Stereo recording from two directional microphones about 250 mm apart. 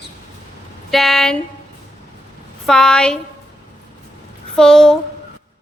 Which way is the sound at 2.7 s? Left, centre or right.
Centre.